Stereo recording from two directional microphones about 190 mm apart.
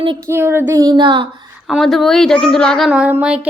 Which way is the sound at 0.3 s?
10° right (ahead or behind).